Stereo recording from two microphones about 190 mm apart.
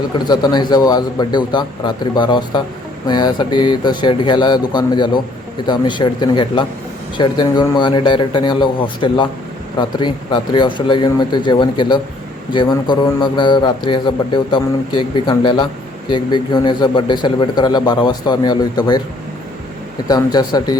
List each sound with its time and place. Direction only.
0.3 s a man's voice: 20° left (ahead or behind)
20.1 s a man's voice: 20° left (ahead or behind)